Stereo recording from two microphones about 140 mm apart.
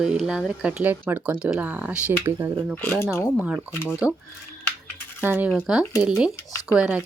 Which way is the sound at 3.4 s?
5° right (ahead or behind).